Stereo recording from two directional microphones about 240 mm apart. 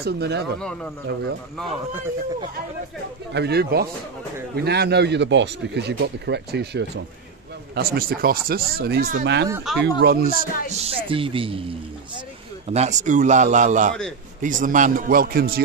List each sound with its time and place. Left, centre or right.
0.0 s speech: right
3.3 s speech: right
10.8 s speech: right
12.6 s speech: right